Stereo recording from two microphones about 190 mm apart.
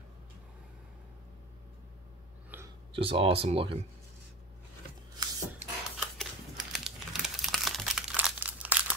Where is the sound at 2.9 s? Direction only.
30° right (ahead or behind).